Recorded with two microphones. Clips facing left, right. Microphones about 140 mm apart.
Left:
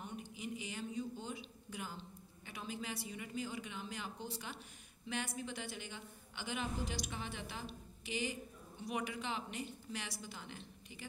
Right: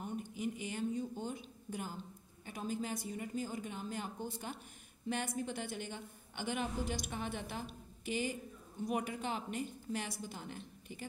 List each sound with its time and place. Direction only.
0.0 s a woman's voice: 45° right (ahead or behind)